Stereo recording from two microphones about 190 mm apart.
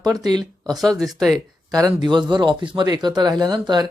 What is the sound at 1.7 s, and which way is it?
Speech, 20° right (ahead or behind).